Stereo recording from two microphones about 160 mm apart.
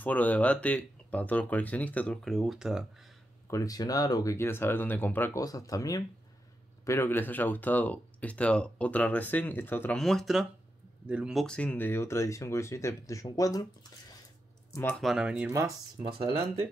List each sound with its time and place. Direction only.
0.0 s speech: 10° left (ahead or behind)
3.4 s speech: 20° left (ahead or behind); by 11.4 s 5° right (ahead or behind)
11.4 s speech: 5° left (ahead or behind)
14.7 s speech: 15° left (ahead or behind)
15.0 s speech: centre (ahead or behind)
16.0 s speech: 30° right (ahead or behind)